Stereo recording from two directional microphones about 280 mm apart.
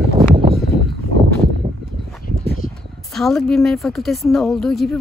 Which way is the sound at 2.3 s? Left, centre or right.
Left.